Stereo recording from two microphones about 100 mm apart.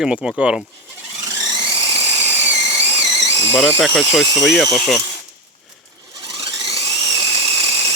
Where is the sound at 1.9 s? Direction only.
85° right.